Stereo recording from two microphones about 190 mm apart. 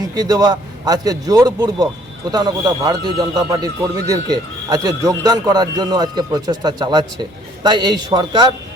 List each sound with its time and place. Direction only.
0.0 s a man's voice: 20° right (ahead or behind)